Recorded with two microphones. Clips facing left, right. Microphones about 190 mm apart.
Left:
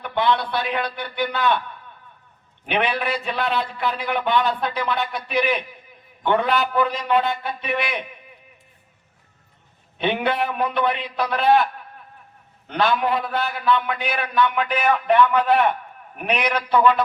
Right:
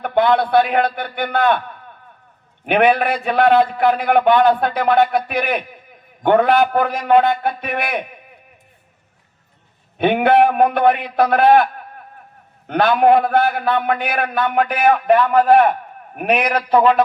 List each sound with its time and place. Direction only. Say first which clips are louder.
0.0 s a man's voice: right 6 dB; 50° right (ahead or behind)
2.6 s a man's voice: right 8 dB; 50° right (ahead or behind)
10.0 s a man's voice: right 9 dB; 55° right (ahead or behind)